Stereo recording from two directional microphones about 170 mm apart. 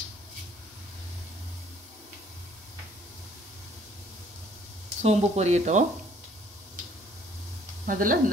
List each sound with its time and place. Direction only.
5.0 s speech: 40° right (ahead or behind)
7.8 s speech: 55° right (ahead or behind)